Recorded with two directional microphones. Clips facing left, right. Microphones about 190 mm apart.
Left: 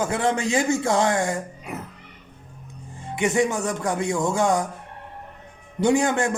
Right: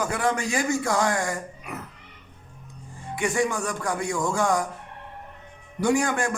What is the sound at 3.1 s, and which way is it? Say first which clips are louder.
A man's voice: left 3 dB; 20° left (ahead or behind).